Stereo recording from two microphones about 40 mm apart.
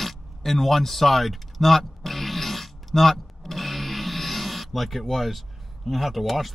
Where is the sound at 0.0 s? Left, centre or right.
Centre.